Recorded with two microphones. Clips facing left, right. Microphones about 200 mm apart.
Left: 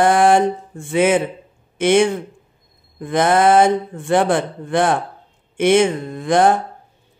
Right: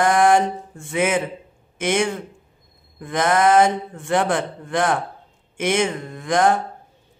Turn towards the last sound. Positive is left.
turn(degrees=30)  # may be behind; listen again after turning